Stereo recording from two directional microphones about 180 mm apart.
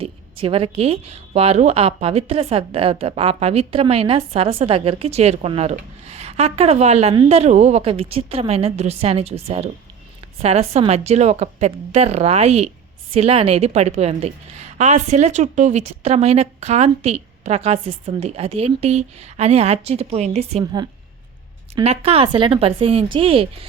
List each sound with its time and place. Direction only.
0.0 s speech: 30° right (ahead or behind)
21.8 s speech: 35° right (ahead or behind)